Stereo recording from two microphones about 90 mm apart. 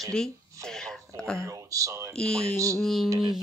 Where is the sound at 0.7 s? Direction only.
5° left (ahead or behind).